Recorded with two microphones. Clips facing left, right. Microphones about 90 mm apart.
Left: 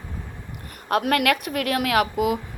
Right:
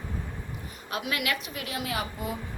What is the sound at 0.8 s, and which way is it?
A woman's voice, 55° left (ahead or behind).